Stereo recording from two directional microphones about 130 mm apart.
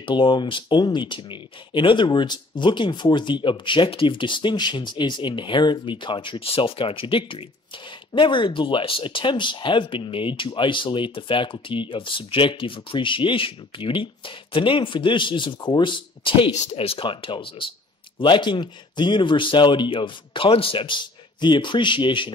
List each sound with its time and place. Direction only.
0.0 s speech: 40° left (ahead or behind)